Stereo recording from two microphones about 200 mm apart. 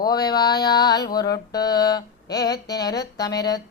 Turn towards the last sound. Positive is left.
turn(degrees=20)  # may be behind; listen again after turning